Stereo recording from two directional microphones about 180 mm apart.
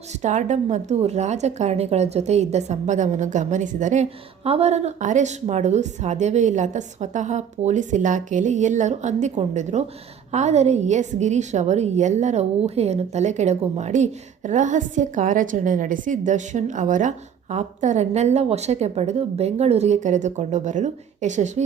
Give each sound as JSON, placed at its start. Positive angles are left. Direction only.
{"t": 0.2, "sound": "a woman's voice", "side_deg": -40}